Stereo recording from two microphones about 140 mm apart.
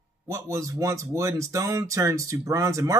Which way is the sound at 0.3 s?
20° right (ahead or behind).